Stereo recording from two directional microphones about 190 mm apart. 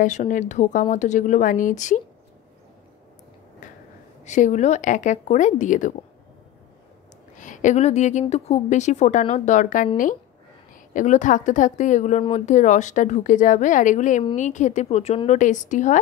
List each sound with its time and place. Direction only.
0.0 s a woman's voice: 40° left (ahead or behind)
4.2 s a woman's voice: 40° left (ahead or behind)
7.3 s a woman's voice: 40° left (ahead or behind)
10.9 s a woman's voice: 40° left (ahead or behind)